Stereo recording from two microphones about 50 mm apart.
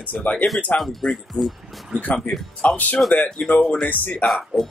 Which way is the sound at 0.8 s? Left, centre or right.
Centre.